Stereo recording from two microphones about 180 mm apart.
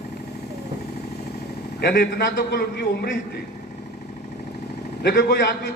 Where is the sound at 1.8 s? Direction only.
65° left (ahead or behind).